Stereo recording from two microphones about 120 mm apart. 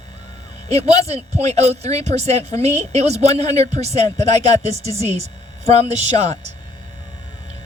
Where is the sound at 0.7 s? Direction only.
65° right (ahead or behind).